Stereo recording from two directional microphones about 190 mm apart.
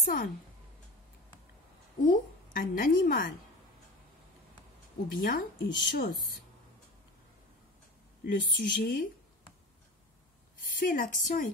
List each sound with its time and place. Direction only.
0.0 s a woman's voice: 45° left (ahead or behind)
2.0 s a woman's voice: 50° left (ahead or behind)
5.1 s speech: 50° left (ahead or behind)
8.3 s speech: 50° left (ahead or behind)
10.8 s speech: 45° left (ahead or behind)